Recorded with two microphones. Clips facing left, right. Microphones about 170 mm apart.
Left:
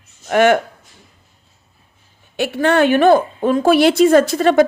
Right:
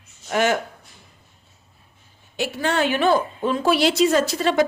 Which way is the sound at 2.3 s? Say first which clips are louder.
Left 7 dB; 60° left (ahead or behind).